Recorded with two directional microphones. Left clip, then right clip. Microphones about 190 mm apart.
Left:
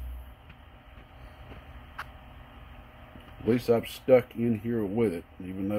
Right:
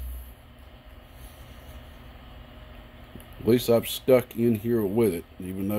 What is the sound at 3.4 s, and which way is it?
Speech, 25° right (ahead or behind).